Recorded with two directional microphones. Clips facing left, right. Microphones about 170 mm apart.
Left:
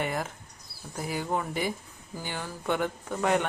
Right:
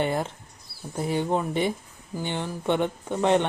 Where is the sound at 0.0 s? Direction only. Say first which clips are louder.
Right 5 dB; 30° right (ahead or behind).